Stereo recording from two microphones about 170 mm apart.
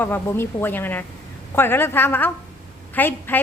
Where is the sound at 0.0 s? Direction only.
15° left (ahead or behind).